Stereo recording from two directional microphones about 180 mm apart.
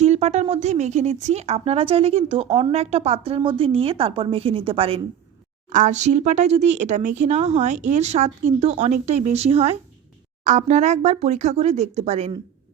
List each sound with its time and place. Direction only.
0.0 s speech: 40° right (ahead or behind)
5.6 s speech: 45° right (ahead or behind)